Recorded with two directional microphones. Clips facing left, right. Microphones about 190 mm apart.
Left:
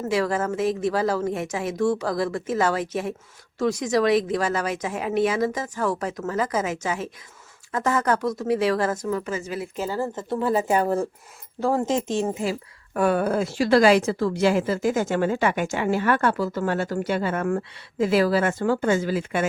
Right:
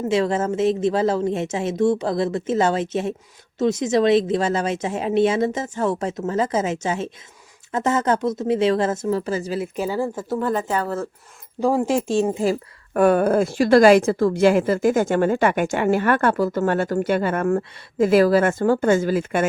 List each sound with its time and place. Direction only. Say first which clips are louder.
0.0 s a woman's voice: right 3 dB; 25° right (ahead or behind)
9.7 s speech: right 1 dB; 15° right (ahead or behind)
10.4 s speech: left 3 dB; 5° left (ahead or behind)
11.6 s speech: right 3 dB; 10° right (ahead or behind)
12.3 s speech: right 5 dB; 35° right (ahead or behind)
12.9 s a woman's voice: right 5 dB; 50° right (ahead or behind)